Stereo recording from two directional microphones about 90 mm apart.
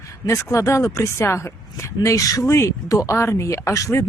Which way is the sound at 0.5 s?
35° left (ahead or behind).